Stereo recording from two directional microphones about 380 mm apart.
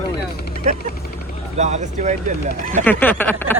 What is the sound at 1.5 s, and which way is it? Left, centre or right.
Speech, centre.